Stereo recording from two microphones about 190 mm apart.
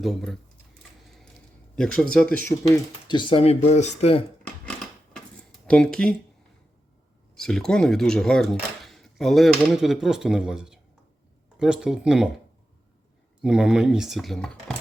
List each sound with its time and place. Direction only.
0.0 s speech: centre (ahead or behind)
0.8 s a sound: centre (ahead or behind)
1.7 s speech: 5° left (ahead or behind)
2.5 s speech: 20° left (ahead or behind)
5.1 s tick-tock: 5° left (ahead or behind)
7.3 s speech: 5° left (ahead or behind)
13.4 s speech: 5° right (ahead or behind)